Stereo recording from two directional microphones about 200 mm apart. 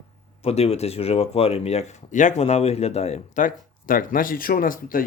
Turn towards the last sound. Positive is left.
turn(degrees=45)  # may be behind; listen again after turning